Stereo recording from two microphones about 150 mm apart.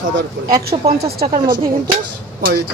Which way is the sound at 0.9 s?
90° right.